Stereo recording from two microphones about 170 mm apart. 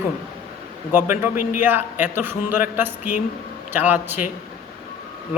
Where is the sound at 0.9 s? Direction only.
15° right (ahead or behind).